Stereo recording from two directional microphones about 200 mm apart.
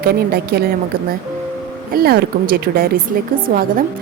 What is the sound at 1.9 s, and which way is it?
Speech, 50° right (ahead or behind).